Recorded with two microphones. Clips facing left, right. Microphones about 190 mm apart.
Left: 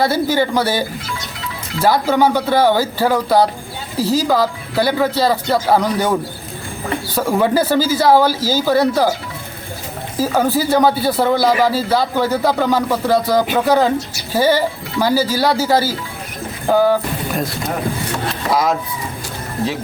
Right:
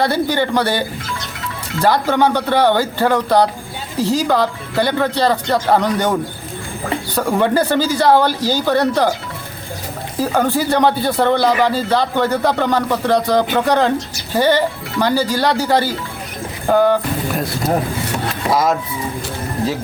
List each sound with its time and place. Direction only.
0.0 s speech: 10° left (ahead or behind)
7.2 s speech: 5° left (ahead or behind)
10.2 s speech: 5° left (ahead or behind)
18.5 s speech: centre (ahead or behind)